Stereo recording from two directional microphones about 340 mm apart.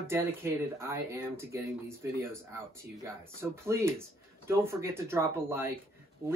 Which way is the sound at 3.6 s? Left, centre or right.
Centre.